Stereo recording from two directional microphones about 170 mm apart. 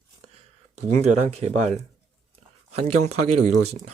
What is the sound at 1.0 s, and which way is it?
Speech, 40° right (ahead or behind).